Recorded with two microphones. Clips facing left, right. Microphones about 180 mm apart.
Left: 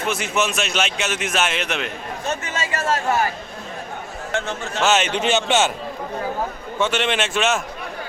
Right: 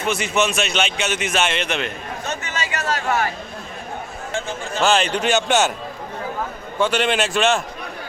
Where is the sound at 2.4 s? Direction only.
30° left (ahead or behind).